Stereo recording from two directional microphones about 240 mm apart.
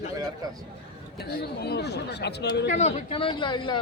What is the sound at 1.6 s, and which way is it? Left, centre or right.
Speech, left.